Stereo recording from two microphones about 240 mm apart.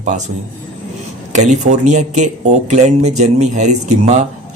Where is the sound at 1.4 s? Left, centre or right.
Right.